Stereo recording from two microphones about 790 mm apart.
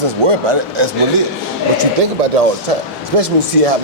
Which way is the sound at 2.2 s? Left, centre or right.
Right.